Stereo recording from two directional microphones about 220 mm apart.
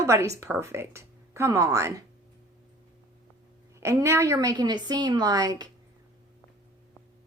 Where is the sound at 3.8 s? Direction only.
10° right (ahead or behind).